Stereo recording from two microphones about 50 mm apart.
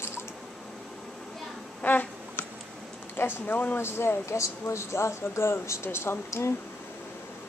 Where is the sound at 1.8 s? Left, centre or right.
Left.